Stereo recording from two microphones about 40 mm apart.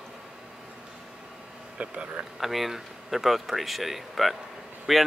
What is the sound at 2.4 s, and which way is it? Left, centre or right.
Speech, centre.